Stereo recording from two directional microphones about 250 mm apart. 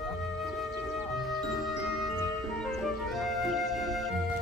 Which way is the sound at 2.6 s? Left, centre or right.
Centre.